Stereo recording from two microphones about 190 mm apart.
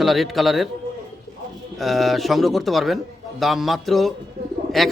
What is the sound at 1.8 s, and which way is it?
A man's voice, centre (ahead or behind).